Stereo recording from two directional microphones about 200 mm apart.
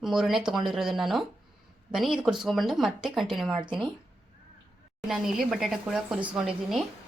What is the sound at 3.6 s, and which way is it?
Speech, 25° right (ahead or behind).